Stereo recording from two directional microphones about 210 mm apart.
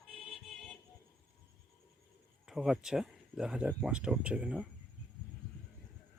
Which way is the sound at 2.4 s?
Centre (ahead or behind).